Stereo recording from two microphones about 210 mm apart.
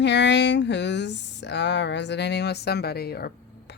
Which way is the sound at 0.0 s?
55° left (ahead or behind).